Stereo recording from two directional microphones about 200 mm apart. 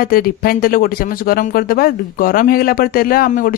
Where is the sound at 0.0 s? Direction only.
45° left (ahead or behind).